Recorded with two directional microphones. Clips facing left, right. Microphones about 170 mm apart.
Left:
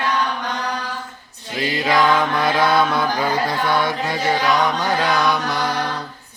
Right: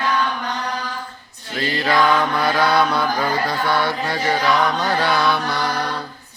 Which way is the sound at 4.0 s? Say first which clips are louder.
Even; 10° left (ahead or behind).